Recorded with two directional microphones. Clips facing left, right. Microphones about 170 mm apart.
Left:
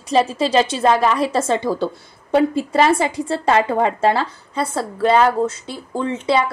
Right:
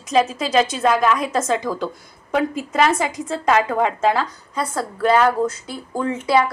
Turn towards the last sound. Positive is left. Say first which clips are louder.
# even
turn(degrees=25)  # may be behind; listen again after turning